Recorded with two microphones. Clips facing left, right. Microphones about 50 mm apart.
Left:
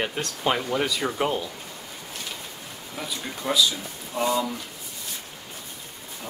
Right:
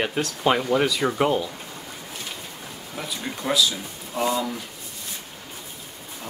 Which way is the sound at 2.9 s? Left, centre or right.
Centre.